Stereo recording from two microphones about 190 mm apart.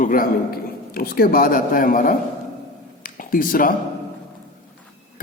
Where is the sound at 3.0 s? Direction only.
45° left (ahead or behind).